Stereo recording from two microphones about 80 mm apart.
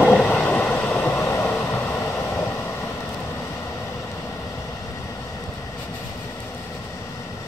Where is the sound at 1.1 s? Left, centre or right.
Left.